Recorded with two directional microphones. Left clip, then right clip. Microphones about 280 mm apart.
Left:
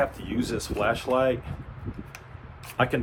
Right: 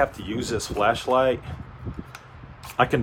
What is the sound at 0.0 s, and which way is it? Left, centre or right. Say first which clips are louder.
Speech: right 3 dB; right.